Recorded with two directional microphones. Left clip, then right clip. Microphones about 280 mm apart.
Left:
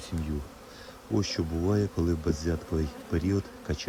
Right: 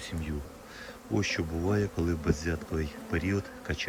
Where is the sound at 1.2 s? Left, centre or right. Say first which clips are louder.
Even; centre.